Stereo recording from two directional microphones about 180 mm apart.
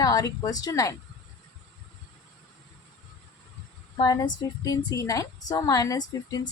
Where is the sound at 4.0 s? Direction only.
20° left (ahead or behind).